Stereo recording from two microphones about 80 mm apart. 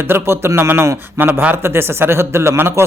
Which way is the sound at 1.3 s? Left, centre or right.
Centre.